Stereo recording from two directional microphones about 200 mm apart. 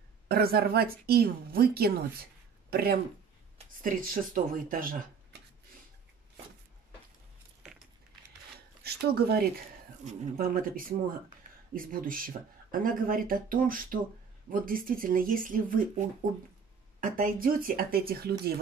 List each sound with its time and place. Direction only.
0.3 s a woman's voice: 50° right (ahead or behind)
7.6 s a sound: centre (ahead or behind)
8.8 s a woman's voice: 50° right (ahead or behind)
17.0 s a woman's voice: 45° right (ahead or behind)